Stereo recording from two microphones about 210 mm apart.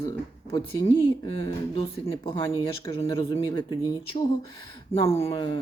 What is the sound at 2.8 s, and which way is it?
Speech, 25° left (ahead or behind).